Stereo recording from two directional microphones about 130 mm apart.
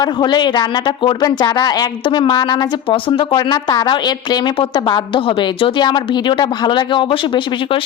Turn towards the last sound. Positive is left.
turn(degrees=40)  # may be behind; listen again after turning